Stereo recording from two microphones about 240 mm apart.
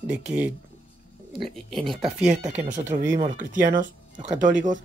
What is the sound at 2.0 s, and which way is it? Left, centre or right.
Speech, right.